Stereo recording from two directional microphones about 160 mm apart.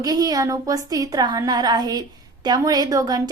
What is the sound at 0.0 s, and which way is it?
A woman's voice, 25° right (ahead or behind).